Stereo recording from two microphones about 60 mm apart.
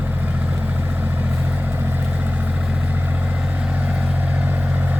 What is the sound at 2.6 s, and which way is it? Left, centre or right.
Vehicle, centre.